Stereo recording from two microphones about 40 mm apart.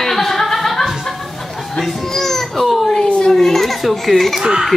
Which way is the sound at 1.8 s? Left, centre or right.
Centre.